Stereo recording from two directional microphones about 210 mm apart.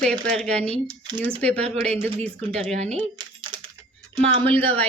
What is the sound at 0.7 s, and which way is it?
Speech, 20° right (ahead or behind).